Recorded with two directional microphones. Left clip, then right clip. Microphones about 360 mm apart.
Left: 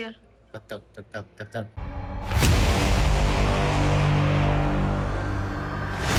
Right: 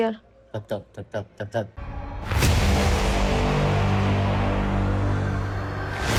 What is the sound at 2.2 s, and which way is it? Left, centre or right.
Music, centre.